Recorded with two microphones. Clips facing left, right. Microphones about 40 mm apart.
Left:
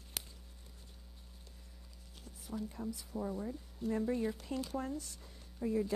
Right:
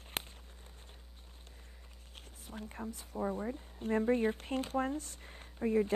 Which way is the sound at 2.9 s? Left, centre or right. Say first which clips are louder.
Right 7 dB; right.